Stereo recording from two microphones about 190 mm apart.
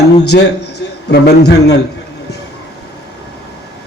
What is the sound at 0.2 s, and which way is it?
A man's voice, 60° left (ahead or behind).